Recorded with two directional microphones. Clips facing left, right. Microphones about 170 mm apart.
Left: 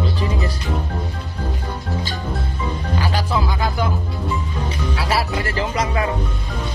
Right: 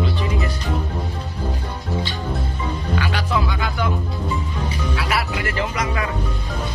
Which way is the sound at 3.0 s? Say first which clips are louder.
Left 2 dB; 35° left (ahead or behind).